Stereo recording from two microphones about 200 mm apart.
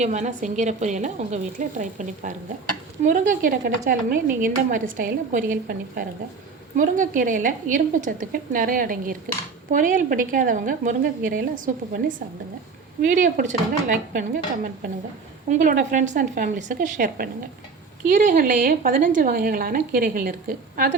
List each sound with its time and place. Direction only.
0.0 s a woman's voice: 35° right (ahead or behind)